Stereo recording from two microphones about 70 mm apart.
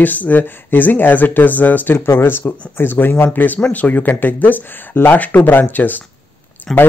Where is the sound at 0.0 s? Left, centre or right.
Left.